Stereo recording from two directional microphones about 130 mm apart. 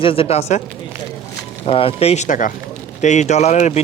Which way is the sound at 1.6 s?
45° left (ahead or behind).